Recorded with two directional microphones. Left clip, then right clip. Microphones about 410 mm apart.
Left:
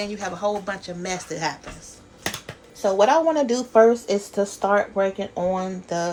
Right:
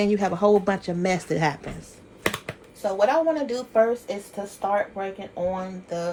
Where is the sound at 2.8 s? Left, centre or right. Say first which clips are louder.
Left 4 dB; centre.